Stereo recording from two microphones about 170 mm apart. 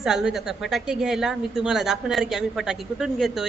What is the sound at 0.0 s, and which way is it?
Speech, centre (ahead or behind).